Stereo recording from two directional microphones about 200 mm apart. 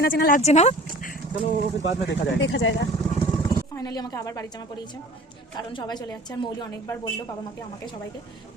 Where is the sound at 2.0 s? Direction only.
65° left (ahead or behind).